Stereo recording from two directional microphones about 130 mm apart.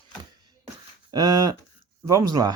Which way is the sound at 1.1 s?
30° right (ahead or behind).